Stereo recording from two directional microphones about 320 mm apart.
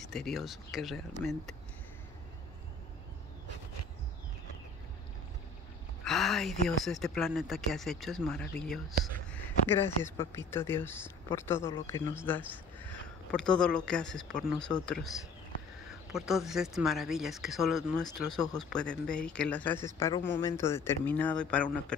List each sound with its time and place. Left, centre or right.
0.0 s speech: centre
6.0 s speech: centre
14.7 s speech: centre
15.9 s speech: centre